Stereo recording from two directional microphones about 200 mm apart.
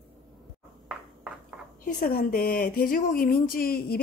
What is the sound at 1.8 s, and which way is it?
Speech, 45° left (ahead or behind).